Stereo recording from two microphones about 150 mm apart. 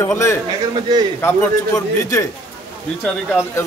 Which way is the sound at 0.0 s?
15° left (ahead or behind).